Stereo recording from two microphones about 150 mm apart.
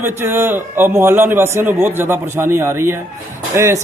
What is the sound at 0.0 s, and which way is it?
Speech, 15° right (ahead or behind).